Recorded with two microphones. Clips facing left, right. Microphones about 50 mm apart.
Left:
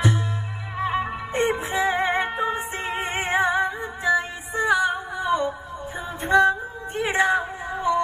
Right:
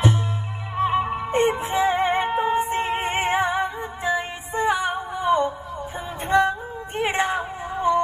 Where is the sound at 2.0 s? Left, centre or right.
Left.